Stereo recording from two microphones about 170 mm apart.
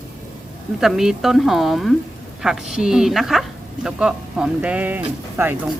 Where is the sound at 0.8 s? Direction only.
Centre (ahead or behind).